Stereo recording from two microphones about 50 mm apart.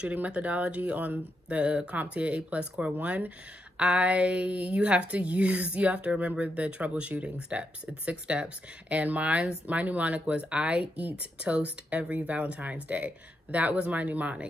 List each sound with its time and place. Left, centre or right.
0.1 s speech: right